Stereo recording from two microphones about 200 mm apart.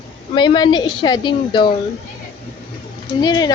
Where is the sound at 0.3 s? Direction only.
20° left (ahead or behind).